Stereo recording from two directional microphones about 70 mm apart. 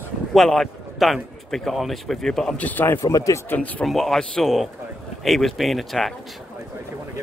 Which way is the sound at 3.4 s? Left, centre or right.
Left.